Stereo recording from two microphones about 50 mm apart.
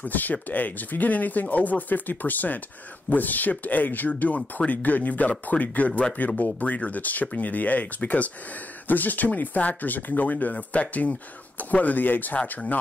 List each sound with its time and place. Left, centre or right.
0.0 s speech: left